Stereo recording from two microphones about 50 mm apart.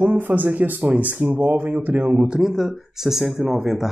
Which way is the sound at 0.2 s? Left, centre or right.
Right.